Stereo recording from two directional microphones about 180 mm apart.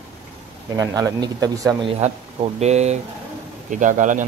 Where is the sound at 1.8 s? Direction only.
35° right (ahead or behind).